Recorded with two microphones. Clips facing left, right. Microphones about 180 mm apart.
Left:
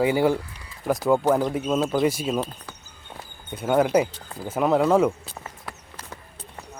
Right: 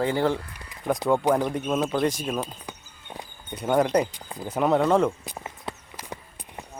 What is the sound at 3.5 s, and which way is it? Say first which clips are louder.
Speech: left 2 dB; 5° left (ahead or behind).